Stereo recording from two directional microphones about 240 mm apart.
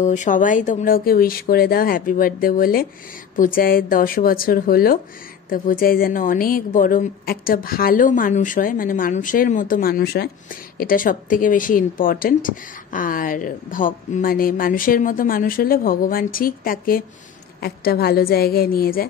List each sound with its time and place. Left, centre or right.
0.0 s a woman's voice: left